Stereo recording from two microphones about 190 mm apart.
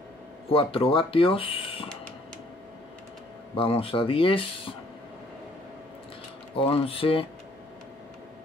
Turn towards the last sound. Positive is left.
turn(degrees=30)  # may be behind; listen again after turning